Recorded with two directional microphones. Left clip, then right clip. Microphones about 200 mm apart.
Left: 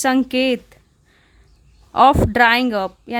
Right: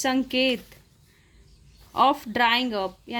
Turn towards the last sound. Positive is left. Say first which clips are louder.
# left 7 dB
turn(degrees=30)  # may be behind; listen again after turning